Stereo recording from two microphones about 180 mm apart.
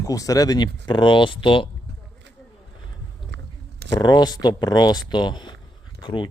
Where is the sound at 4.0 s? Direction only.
20° left (ahead or behind).